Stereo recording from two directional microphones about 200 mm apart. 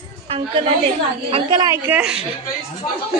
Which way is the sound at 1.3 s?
25° right (ahead or behind).